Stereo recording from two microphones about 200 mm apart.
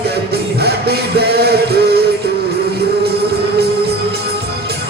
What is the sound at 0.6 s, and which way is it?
Music, 55° right (ahead or behind).